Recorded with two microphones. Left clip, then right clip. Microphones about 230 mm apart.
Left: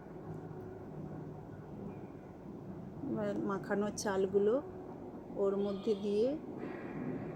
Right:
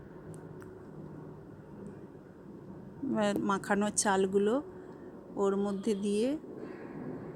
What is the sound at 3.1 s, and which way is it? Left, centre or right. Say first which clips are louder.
Speech: right 7 dB; right.